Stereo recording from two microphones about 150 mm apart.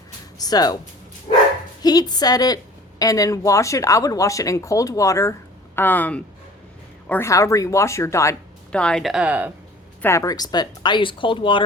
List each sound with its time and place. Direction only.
0.3 s speech: 25° left (ahead or behind)
1.3 s bow-wow: 45° left (ahead or behind)
1.8 s speech: 25° left (ahead or behind)
8.7 s speech: 5° left (ahead or behind); by 9.5 s 10° right (ahead or behind)
10.0 s speech: 20° left (ahead or behind); by 11.6 s 35° left (ahead or behind)